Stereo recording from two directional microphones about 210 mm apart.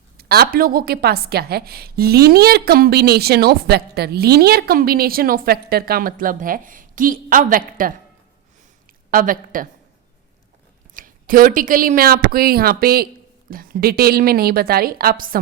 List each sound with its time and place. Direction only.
0.2 s a woman's voice: 45° right (ahead or behind)
9.0 s a woman's voice: 40° right (ahead or behind)
10.9 s a woman's voice: 40° right (ahead or behind)